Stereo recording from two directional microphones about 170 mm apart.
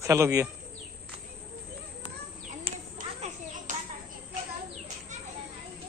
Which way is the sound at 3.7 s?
50° right (ahead or behind).